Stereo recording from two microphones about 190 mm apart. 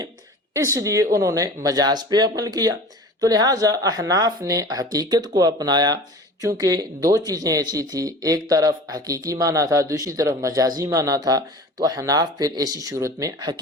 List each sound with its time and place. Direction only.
0.5 s a woman's voice: 15° right (ahead or behind)